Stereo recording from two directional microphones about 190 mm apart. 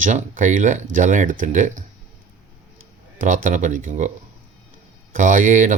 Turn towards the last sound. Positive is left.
turn(degrees=-45)  # may be behind; listen again after turning